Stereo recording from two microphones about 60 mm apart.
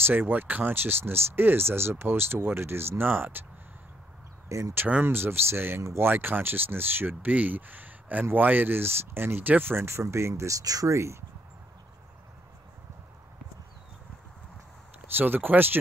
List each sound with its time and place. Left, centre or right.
0.0 s speech: right
4.5 s speech: right
5.0 s speech: right
15.1 s speech: right